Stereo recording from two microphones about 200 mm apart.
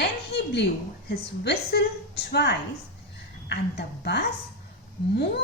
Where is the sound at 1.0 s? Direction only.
55° left (ahead or behind).